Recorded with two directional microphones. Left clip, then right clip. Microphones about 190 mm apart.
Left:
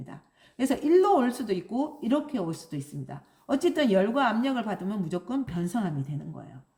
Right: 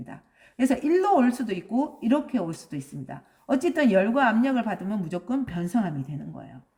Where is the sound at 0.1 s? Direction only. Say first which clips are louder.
Right 3 dB; 35° right (ahead or behind).